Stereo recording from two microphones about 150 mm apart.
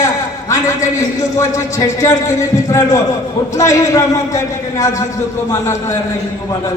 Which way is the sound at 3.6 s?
20° left (ahead or behind).